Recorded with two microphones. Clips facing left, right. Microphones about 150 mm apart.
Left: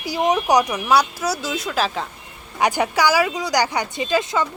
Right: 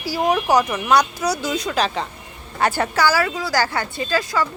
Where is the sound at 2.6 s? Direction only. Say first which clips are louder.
Even; 15° left (ahead or behind).